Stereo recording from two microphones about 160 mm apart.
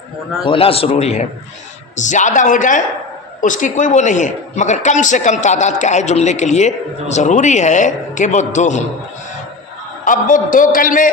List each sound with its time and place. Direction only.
0.4 s a man's voice: 35° left (ahead or behind)
10.0 s a man's voice: 55° left (ahead or behind)